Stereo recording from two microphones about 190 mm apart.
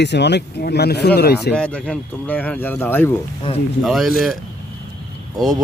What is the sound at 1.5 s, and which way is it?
Speech, 5° left (ahead or behind).